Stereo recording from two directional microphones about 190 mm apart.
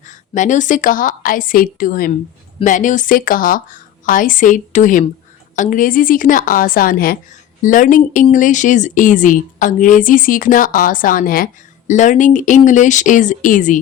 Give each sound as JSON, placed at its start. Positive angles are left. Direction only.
{"t": 0.1, "sound": "speech", "side_deg": 40}